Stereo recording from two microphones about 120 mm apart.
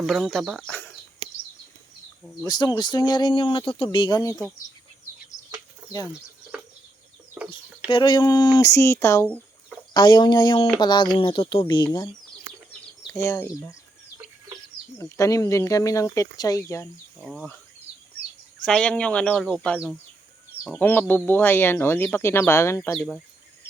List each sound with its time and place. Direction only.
0.0 s speech: centre (ahead or behind)
0.7 s a sound: 15° left (ahead or behind)
2.4 s speech: 35° left (ahead or behind)
7.3 s chicken: 10° right (ahead or behind)
7.9 s speech: 40° left (ahead or behind); by 9.3 s 25° left (ahead or behind)
9.9 s speech: 35° left (ahead or behind)
13.1 s speech: 25° left (ahead or behind)
14.9 s speech: 25° left (ahead or behind)
17.2 s speech: 5° right (ahead or behind)
18.6 s speech: 5° left (ahead or behind)
20.7 s speech: 15° left (ahead or behind)
23.0 s speech: 5° left (ahead or behind)